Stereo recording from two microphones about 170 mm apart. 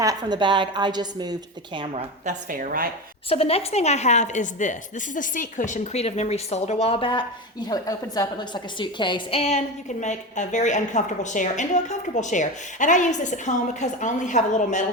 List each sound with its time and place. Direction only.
0.0 s a woman's voice: 20° right (ahead or behind)
2.2 s speech: 50° right (ahead or behind)
3.2 s a woman's voice: 35° left (ahead or behind)